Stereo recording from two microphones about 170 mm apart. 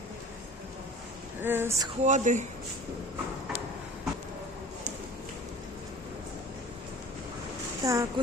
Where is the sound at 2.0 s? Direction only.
45° right (ahead or behind).